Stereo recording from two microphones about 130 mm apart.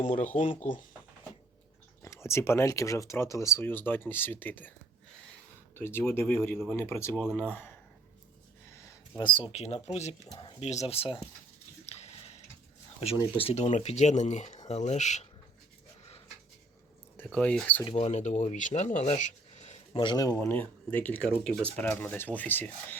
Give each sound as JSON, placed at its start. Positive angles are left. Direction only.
{"t": 0.6, "sound": "speech", "side_deg": 90}
{"t": 2.0, "sound": "speech", "side_deg": 25}
{"t": 5.7, "sound": "speech", "side_deg": 20}
{"t": 9.1, "sound": "speech", "side_deg": 40}
{"t": 11.9, "sound": "chewing", "side_deg": 55}
{"t": 13.3, "sound": "speech", "side_deg": 50}
{"t": 17.2, "sound": "speech", "side_deg": 10}
{"t": 17.8, "sound": "speech", "side_deg": 55}
{"t": 19.9, "sound": "a man's voice", "side_deg": 40}
{"t": 20.1, "sound": "speech", "side_deg": 25}